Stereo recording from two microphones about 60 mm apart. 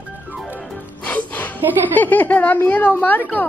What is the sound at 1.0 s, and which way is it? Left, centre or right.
Music, left.